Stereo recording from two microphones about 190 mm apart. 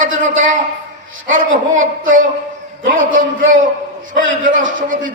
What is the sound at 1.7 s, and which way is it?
Speech, 90° right.